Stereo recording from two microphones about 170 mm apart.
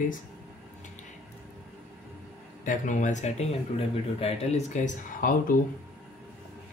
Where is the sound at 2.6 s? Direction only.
50° left (ahead or behind).